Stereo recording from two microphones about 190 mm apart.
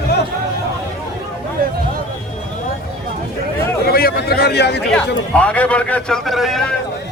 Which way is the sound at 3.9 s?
55° left (ahead or behind).